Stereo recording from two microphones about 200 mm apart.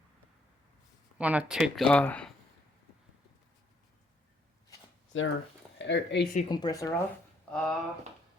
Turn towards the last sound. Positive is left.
turn(degrees=5)  # may be behind; listen again after turning